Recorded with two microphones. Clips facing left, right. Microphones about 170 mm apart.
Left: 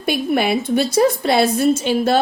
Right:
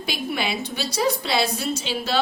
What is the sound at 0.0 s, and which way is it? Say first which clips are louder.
A woman's voice: left 9 dB; 50° left (ahead or behind).